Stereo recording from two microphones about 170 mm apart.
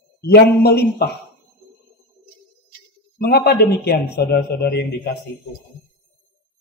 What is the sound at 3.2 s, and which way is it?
A man's voice, 70° left (ahead or behind).